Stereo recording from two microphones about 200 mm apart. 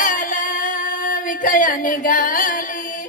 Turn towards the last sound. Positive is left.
turn(degrees=40)  # may be behind; listen again after turning